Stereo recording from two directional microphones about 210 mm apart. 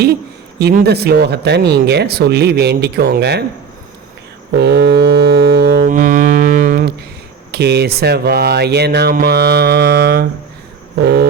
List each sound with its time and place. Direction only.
0.6 s speech: 50° right (ahead or behind)
4.5 s music: 50° right (ahead or behind)
7.5 s speech: 50° right (ahead or behind)